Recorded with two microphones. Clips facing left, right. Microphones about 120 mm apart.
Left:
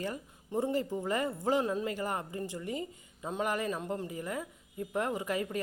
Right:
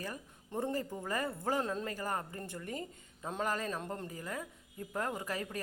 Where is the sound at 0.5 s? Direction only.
15° left (ahead or behind).